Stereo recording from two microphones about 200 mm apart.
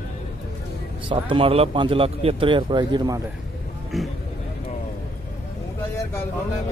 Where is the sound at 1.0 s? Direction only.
25° right (ahead or behind).